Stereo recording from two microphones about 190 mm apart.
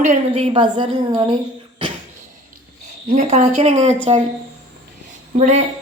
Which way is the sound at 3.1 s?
35° right (ahead or behind).